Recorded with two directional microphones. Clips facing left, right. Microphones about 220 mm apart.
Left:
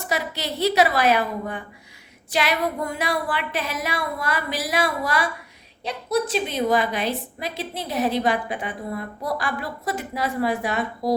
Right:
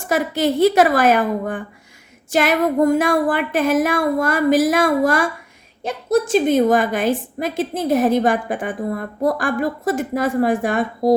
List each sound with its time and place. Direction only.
0.0 s a woman's voice: 50° right (ahead or behind)